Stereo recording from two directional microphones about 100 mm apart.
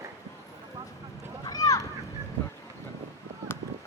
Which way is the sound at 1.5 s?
35° left (ahead or behind).